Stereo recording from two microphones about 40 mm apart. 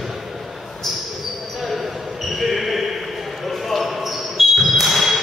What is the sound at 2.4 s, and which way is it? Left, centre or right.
Basketball bounce, centre.